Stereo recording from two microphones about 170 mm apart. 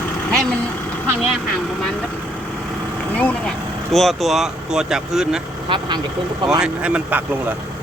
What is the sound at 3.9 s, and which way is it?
Speech, centre (ahead or behind).